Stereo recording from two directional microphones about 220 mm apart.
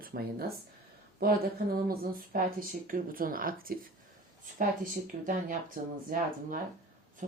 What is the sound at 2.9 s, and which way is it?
Speech, 40° right (ahead or behind).